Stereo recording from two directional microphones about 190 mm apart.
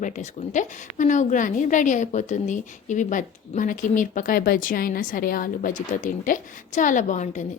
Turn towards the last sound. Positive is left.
turn(degrees=40)  # may be behind; listen again after turning